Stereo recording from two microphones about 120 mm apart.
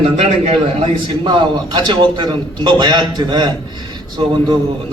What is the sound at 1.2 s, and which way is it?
A man's voice, 40° right (ahead or behind).